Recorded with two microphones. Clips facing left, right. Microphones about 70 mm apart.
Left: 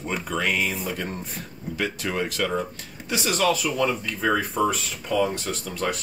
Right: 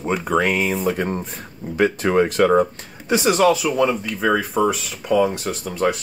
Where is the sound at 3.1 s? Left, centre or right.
Right.